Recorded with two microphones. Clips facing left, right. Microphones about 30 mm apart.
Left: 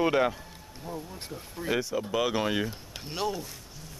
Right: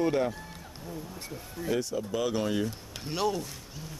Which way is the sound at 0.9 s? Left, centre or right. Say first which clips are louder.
Left 2 dB; left.